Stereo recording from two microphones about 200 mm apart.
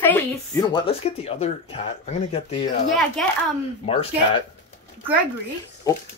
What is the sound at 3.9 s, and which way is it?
Speech, 30° left (ahead or behind).